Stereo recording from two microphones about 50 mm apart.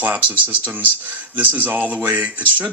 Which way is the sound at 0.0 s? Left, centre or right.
Right.